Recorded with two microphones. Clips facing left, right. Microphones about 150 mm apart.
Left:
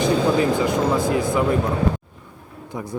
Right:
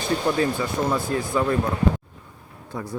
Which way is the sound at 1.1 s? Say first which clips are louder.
Left 3 dB; 15° left (ahead or behind).